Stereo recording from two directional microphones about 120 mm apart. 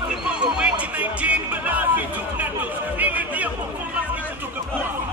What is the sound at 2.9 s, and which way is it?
Chatter, 15° right (ahead or behind).